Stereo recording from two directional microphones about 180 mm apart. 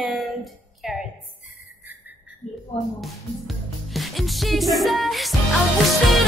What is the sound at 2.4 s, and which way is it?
Speech, 40° left (ahead or behind).